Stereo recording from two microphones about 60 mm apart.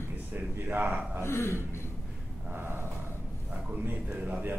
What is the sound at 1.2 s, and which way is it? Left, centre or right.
Burping, left.